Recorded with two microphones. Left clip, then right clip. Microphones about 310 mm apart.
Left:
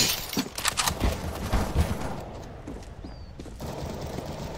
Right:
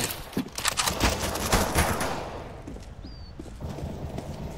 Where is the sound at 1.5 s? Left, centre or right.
Right.